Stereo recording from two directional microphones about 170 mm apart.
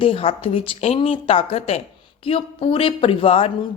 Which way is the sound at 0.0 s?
35° left (ahead or behind).